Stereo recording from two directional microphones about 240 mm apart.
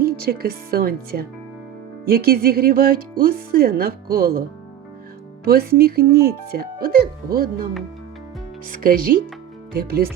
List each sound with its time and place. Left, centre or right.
0.0 s speech: right
5.5 s speech: right
8.7 s speech: right